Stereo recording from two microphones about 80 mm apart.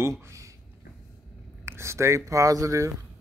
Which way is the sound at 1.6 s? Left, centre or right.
Right.